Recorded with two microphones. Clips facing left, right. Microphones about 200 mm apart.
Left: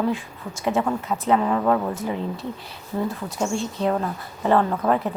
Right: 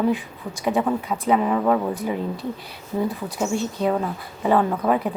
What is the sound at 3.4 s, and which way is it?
Speech, 5° right (ahead or behind).